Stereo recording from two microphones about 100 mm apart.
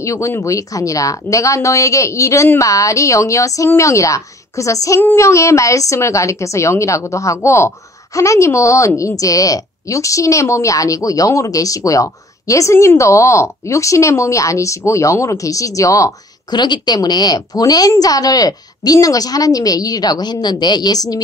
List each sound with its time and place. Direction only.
0.0 s speech: 30° left (ahead or behind)
16.5 s speech: 45° left (ahead or behind)